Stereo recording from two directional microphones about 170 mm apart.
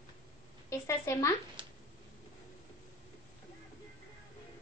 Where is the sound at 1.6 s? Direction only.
30° right (ahead or behind).